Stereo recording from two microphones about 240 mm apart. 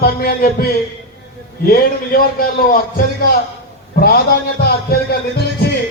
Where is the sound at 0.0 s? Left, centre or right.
Left.